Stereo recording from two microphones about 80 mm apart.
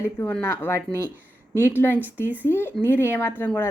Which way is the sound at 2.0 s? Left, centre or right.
Right.